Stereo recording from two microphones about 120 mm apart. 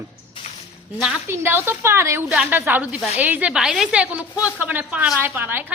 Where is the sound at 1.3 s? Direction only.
20° right (ahead or behind).